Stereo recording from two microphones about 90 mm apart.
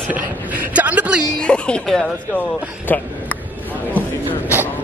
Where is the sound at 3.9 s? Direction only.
20° left (ahead or behind).